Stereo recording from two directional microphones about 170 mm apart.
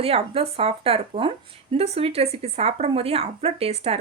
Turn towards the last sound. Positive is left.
turn(degrees=-35)  # may be behind; listen again after turning